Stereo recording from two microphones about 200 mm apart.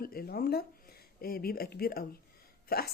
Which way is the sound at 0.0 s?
50° left (ahead or behind).